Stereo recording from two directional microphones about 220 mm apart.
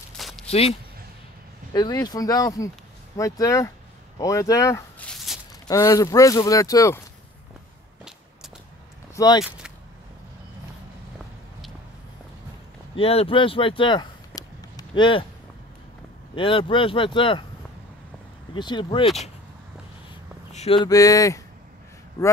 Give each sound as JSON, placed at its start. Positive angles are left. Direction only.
{"t": 0.5, "sound": "speech", "side_deg": 30}
{"t": 5.1, "sound": "walk", "side_deg": 0}
{"t": 5.7, "sound": "speech", "side_deg": 15}
{"t": 9.1, "sound": "speech", "side_deg": 15}
{"t": 12.9, "sound": "speech", "side_deg": 25}
{"t": 16.3, "sound": "speech", "side_deg": 25}
{"t": 18.5, "sound": "speech", "side_deg": 20}
{"t": 20.5, "sound": "speech", "side_deg": 25}